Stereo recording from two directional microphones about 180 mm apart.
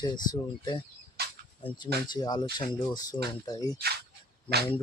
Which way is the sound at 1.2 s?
60° right (ahead or behind).